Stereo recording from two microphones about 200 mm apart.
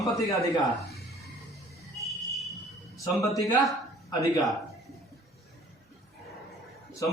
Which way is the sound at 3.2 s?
15° left (ahead or behind).